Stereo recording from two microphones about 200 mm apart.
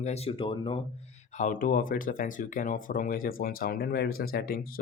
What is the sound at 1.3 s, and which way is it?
Speech, 40° left (ahead or behind).